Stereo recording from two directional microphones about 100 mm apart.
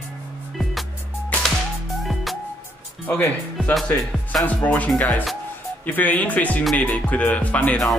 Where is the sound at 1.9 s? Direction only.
Centre (ahead or behind).